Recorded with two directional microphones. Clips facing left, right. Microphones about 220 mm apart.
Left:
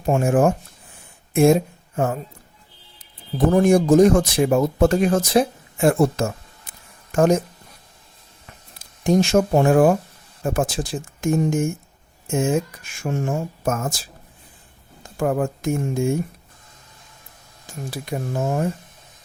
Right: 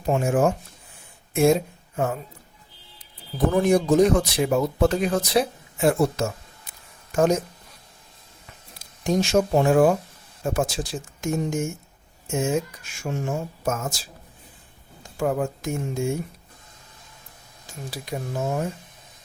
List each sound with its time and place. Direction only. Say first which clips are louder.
0.0 s speech: left 3 dB; 50° left (ahead or behind)
3.3 s speech: left 4 dB; 45° left (ahead or behind)
9.0 s speech: left 4 dB; 50° left (ahead or behind)
15.2 s speech: left 3 dB; 55° left (ahead or behind)
17.9 s speech: left 3 dB; 50° left (ahead or behind)